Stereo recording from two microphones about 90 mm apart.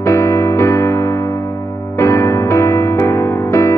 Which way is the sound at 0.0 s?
35° left (ahead or behind).